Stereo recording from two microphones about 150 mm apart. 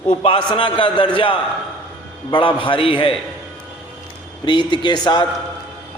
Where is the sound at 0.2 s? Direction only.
35° left (ahead or behind).